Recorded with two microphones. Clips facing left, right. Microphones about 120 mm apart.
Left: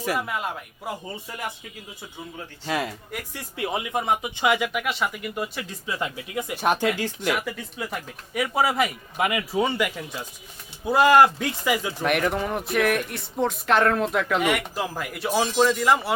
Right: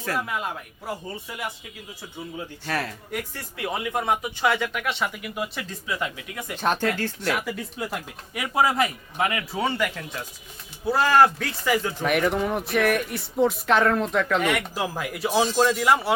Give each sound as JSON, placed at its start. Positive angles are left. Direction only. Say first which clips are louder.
{"t": 0.0, "sound": "speech", "louder": "left 2 dB", "side_deg": 15}
{"t": 0.3, "sound": "speech", "louder": "even", "side_deg": 0}
{"t": 2.6, "sound": "speech", "louder": "left 3 dB", "side_deg": 15}
{"t": 5.8, "sound": "speech", "louder": "even", "side_deg": 25}
{"t": 6.6, "sound": "speech", "louder": "left 1 dB", "side_deg": 10}
{"t": 7.5, "sound": "speech", "louder": "right 1 dB", "side_deg": 0}
{"t": 9.2, "sound": "speech", "louder": "left 2 dB", "side_deg": 15}